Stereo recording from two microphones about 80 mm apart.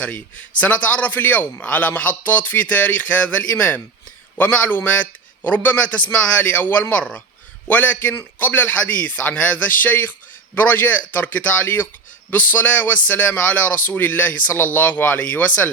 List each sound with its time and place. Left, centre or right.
0.0 s a man's voice: centre